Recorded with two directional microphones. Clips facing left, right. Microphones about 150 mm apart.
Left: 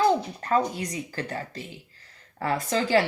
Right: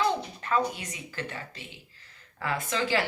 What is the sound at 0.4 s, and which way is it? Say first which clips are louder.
Speech: left 2 dB; 40° left (ahead or behind).